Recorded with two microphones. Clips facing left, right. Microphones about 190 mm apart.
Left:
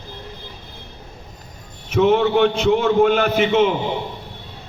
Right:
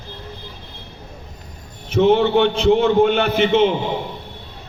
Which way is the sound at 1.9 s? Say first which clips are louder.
Right 1 dB; 35° right (ahead or behind).